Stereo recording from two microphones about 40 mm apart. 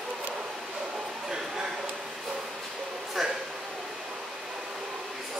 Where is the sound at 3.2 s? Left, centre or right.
Centre.